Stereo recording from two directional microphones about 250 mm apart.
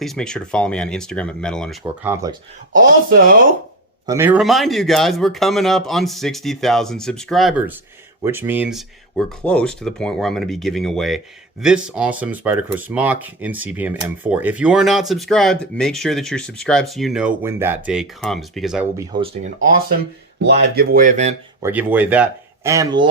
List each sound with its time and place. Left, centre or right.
0.0 s speech: centre
3.1 s speech: right
4.0 s speech: centre
20.4 s speech: right
21.6 s speech: centre